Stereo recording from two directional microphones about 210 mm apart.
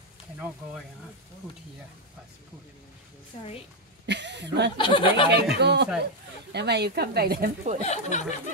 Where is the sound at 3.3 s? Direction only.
30° left (ahead or behind).